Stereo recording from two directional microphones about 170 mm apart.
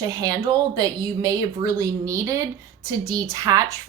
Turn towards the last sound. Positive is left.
turn(degrees=-20)  # may be behind; listen again after turning